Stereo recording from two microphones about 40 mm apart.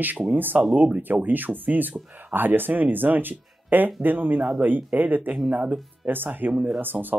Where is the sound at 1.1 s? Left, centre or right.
Right.